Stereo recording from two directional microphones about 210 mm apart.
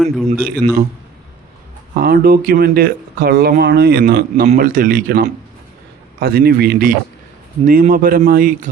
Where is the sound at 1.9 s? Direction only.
45° right (ahead or behind).